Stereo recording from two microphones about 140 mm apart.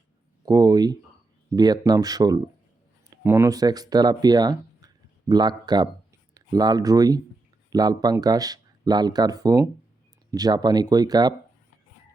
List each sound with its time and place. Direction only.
0.4 s speech: 25° right (ahead or behind)